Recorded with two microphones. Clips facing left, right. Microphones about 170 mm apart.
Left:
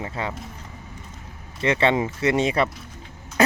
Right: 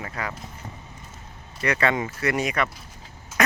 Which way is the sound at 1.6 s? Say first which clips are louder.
Left 3 dB; 25° left (ahead or behind).